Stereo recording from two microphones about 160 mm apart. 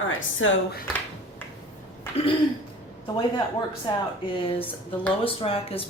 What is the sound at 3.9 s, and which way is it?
A woman's voice, 25° left (ahead or behind).